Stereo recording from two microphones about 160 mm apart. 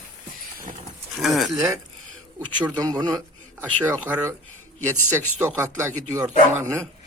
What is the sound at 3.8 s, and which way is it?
Speech, 10° right (ahead or behind).